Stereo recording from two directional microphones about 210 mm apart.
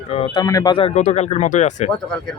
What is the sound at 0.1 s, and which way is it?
Speech, 25° left (ahead or behind).